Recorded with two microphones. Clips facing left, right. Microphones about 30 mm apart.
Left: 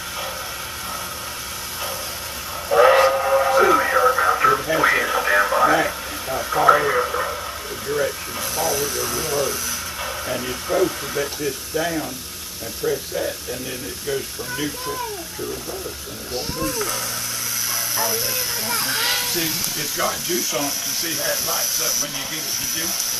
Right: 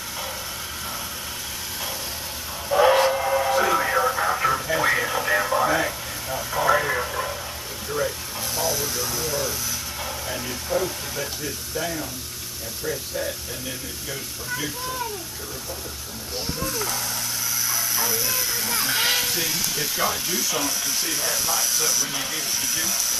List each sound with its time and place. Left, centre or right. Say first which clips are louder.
2.7 s steam whistle: left 4 dB; left
3.1 s television: left 4 dB; centre
6.5 s radio: left 5 dB; left
9.0 s speech: left 3 dB; left
10.5 s speech: left 5 dB; left
16.7 s speech: left 2 dB; centre
17.6 s a sound: left 2 dB; left
18.6 s speech: left 2 dB; left
18.9 s speech: right 1 dB; centre
19.8 s speech: left 2 dB; centre